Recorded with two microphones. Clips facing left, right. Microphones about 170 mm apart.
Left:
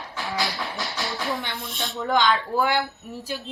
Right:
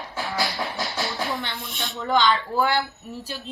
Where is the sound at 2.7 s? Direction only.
15° left (ahead or behind).